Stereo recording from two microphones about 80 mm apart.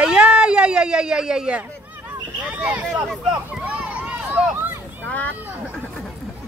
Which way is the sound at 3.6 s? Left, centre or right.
Centre.